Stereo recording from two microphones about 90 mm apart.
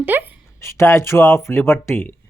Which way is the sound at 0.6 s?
30° left (ahead or behind).